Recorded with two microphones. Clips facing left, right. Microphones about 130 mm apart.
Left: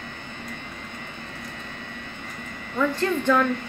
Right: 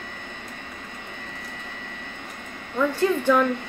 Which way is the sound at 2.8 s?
10° right (ahead or behind).